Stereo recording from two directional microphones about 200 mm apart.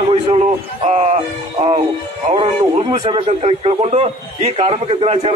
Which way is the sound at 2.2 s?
30° right (ahead or behind).